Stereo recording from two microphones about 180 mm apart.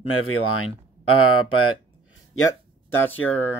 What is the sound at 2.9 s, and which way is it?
Speech, 10° left (ahead or behind).